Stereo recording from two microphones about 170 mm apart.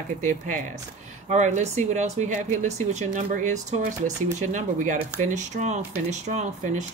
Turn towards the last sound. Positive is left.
turn(degrees=-45)  # may be behind; listen again after turning